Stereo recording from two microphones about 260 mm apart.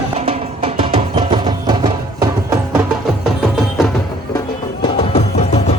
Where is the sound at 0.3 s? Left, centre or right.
Right.